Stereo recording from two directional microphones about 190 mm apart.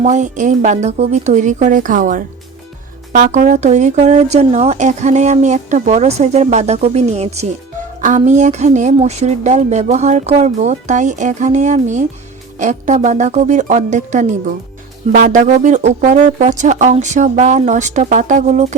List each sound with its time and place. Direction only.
0.0 s speech: 40° right (ahead or behind)